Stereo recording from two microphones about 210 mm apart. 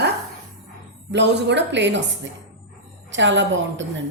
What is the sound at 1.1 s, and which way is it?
A woman's voice, 55° right (ahead or behind).